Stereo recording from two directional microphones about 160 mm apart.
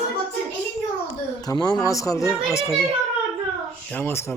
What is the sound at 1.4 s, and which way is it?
Speech, 25° left (ahead or behind).